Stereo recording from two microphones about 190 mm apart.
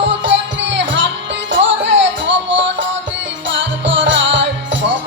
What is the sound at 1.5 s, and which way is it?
Music, 75° right (ahead or behind).